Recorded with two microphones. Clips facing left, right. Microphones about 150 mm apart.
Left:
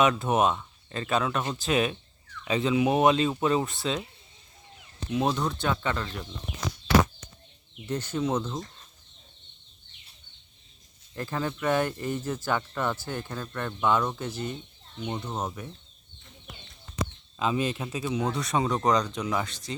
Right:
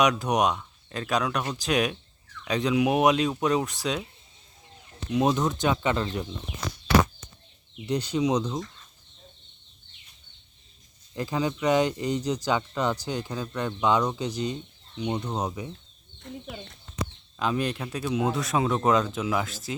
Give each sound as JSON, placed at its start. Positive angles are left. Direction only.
{"t": 0.0, "sound": "speech", "side_deg": 0}
{"t": 5.0, "sound": "speech", "side_deg": 0}
{"t": 5.5, "sound": "speech", "side_deg": -15}
{"t": 7.9, "sound": "speech", "side_deg": -15}
{"t": 11.1, "sound": "speech", "side_deg": -15}
{"t": 16.2, "sound": "chicken", "side_deg": -70}
{"t": 17.3, "sound": "speech", "side_deg": 0}